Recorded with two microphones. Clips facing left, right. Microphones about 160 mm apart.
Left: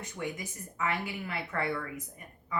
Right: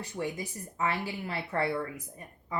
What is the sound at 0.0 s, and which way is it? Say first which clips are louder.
Speech: right 3 dB; 30° right (ahead or behind).